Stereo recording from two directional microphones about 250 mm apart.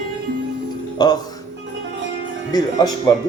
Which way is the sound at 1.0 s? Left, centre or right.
Centre.